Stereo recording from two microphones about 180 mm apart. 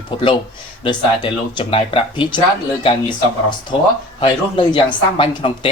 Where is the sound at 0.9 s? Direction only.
25° left (ahead or behind).